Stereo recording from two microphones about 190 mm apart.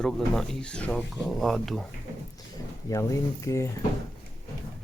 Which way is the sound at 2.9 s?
15° left (ahead or behind).